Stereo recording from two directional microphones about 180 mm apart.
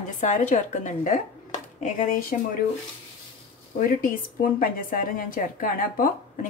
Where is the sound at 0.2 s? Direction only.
45° left (ahead or behind).